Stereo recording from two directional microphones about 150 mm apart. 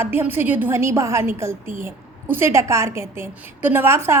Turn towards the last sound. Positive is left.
turn(degrees=-15)  # may be behind; listen again after turning